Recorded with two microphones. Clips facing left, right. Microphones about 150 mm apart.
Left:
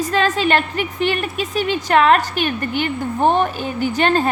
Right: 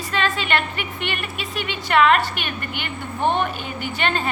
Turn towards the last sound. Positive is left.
turn(degrees=40)  # may be behind; listen again after turning